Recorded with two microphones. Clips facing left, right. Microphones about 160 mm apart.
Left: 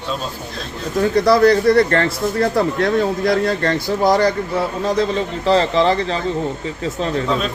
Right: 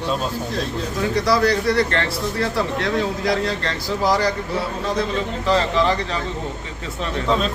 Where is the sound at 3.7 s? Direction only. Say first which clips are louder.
Left 3 dB; 25° left (ahead or behind).